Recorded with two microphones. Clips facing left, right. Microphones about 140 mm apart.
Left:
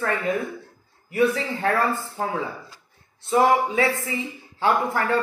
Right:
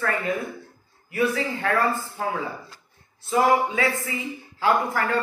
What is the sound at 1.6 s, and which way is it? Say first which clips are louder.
Speech: left 2 dB; 30° left (ahead or behind).